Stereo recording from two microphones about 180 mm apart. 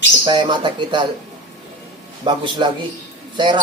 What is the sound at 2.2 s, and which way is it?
Speech, 25° right (ahead or behind).